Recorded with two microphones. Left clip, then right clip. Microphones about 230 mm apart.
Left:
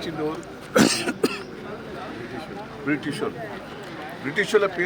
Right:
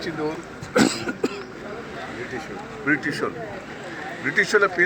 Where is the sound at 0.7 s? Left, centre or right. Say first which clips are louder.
Left 1 dB; left.